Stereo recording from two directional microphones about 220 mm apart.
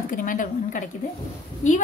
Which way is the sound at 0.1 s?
40° left (ahead or behind).